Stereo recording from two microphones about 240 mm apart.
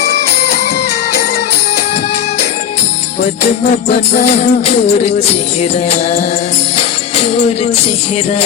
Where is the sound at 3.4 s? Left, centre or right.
Left.